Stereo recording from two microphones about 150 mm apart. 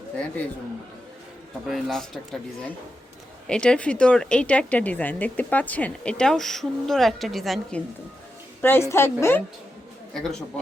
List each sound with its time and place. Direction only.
1.6 s a man's voice: centre (ahead or behind)
3.4 s speech: 5° left (ahead or behind)
8.6 s speech: 15° left (ahead or behind)